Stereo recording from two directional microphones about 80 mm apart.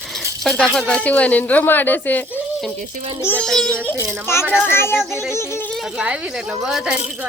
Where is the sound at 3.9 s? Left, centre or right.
Left.